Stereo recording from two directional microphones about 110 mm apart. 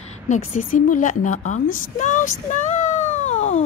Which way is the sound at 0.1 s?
90° left.